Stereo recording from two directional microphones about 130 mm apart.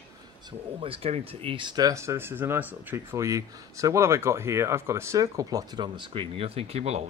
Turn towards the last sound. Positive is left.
turn(degrees=-55)  # may be behind; listen again after turning